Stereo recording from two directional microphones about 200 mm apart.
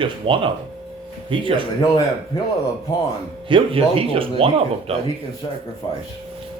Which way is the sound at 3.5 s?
25° right (ahead or behind).